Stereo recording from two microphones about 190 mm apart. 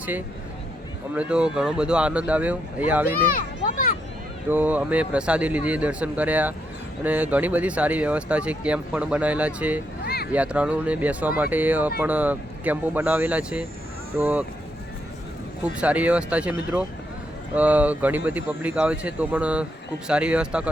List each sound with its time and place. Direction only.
1.1 s speech: 5° right (ahead or behind)
4.4 s speech: 10° right (ahead or behind)
10.0 s a sound: 55° left (ahead or behind)
10.3 s speech: 5° right (ahead or behind)
15.6 s speech: 5° right (ahead or behind)